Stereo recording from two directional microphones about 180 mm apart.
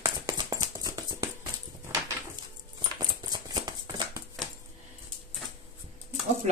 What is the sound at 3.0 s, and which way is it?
Clip-clop, 20° right (ahead or behind).